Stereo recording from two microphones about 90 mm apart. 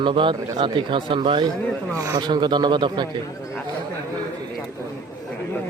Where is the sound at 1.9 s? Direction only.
40° right (ahead or behind).